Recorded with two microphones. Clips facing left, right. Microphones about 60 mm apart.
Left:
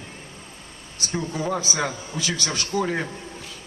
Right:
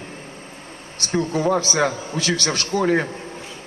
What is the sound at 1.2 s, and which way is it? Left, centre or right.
Speech, right.